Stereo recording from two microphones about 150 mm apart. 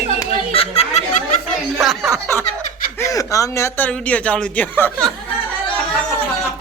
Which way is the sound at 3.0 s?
20° left (ahead or behind).